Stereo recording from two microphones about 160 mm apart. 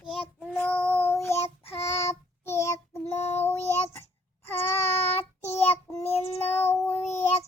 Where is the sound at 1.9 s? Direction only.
20° left (ahead or behind).